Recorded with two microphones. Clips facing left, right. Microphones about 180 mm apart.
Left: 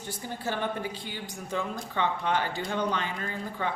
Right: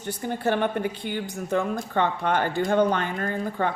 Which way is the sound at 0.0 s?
60° right (ahead or behind).